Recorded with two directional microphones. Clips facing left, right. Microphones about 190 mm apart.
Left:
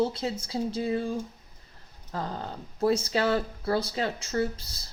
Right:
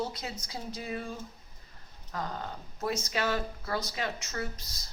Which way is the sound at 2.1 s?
30° left (ahead or behind).